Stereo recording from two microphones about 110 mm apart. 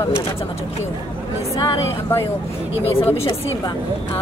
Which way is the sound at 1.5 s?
30° left (ahead or behind).